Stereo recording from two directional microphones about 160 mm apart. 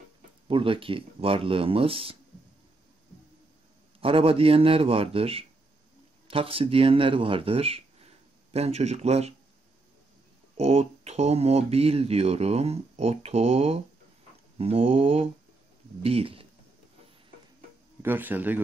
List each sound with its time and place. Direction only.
0.5 s speech: 35° right (ahead or behind)
4.0 s speech: 35° right (ahead or behind)
10.6 s speech: 40° right (ahead or behind)
18.0 s a man's voice: 10° right (ahead or behind)